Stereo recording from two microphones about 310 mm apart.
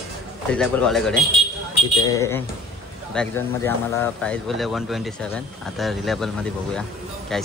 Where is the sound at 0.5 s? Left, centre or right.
Centre.